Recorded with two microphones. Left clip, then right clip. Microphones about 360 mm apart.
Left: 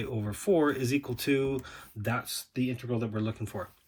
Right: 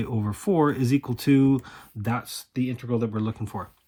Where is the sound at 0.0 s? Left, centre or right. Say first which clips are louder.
Right 3 dB; centre.